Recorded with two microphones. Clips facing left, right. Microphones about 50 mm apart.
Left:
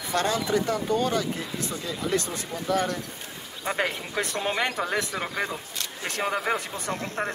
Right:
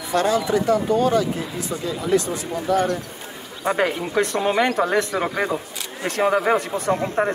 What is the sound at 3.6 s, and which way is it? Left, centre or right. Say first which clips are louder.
Speech: right 7 dB; centre.